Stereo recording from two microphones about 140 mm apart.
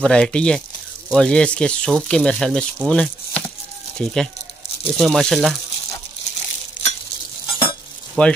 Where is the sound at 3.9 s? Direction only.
5° left (ahead or behind).